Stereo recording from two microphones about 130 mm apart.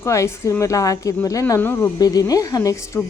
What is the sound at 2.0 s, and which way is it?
A woman's voice, 30° left (ahead or behind).